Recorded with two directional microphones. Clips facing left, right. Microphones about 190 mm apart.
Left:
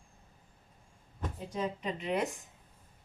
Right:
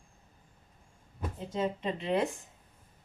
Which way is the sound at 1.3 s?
25° right (ahead or behind).